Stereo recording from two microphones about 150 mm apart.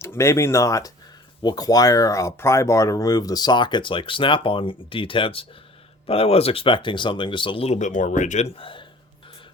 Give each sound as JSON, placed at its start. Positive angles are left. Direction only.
{"t": 0.0, "sound": "speech", "side_deg": 20}